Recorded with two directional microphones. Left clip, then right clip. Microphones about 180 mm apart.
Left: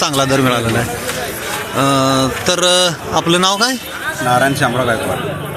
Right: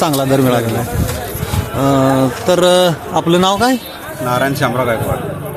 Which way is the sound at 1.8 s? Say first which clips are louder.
Right 2 dB; 15° right (ahead or behind).